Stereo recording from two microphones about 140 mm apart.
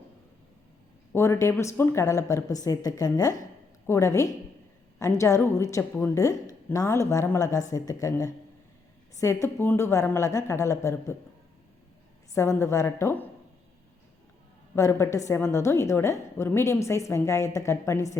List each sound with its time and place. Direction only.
1.1 s a woman's voice: 20° left (ahead or behind)
12.3 s a woman's voice: 20° left (ahead or behind)
14.8 s a woman's voice: 20° left (ahead or behind)